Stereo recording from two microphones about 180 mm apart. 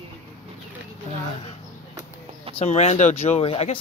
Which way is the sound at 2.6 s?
35° left (ahead or behind).